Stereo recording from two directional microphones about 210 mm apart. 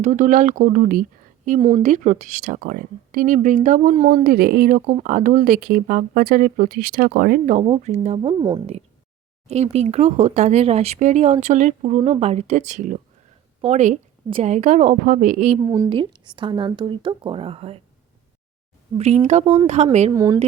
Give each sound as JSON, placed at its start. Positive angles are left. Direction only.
{"t": 0.0, "sound": "speech", "side_deg": -35}
{"t": 1.5, "sound": "speech", "side_deg": -25}
{"t": 4.1, "sound": "speech", "side_deg": -45}
{"t": 7.6, "sound": "speech", "side_deg": -30}
{"t": 9.5, "sound": "speech", "side_deg": -30}
{"t": 15.7, "sound": "speech", "side_deg": -20}
{"t": 18.9, "sound": "speech", "side_deg": -30}
{"t": 20.1, "sound": "speech", "side_deg": -15}